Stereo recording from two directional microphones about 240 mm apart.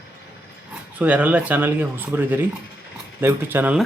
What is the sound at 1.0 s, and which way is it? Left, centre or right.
Speech, centre.